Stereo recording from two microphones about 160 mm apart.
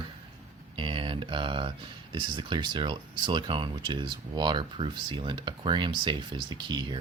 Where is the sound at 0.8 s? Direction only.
30° right (ahead or behind).